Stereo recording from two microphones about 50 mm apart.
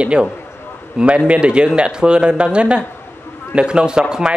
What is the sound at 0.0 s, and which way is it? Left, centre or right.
A man's voice, right.